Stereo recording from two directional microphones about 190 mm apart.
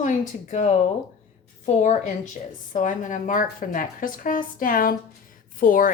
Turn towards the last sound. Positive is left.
turn(degrees=45)  # may be behind; listen again after turning